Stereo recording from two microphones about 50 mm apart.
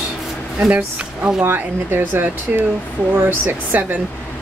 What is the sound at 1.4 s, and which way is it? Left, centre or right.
A woman's voice, right.